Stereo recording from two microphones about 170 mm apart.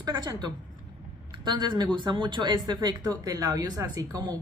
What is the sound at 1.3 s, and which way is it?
Speech, 25° right (ahead or behind).